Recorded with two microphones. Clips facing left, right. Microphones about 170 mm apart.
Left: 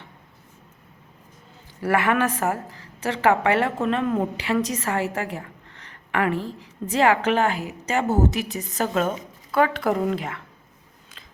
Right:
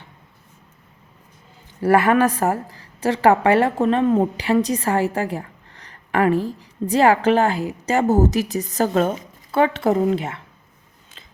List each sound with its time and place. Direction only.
1.8 s a woman's voice: 35° right (ahead or behind)
9.5 s speech: 25° right (ahead or behind)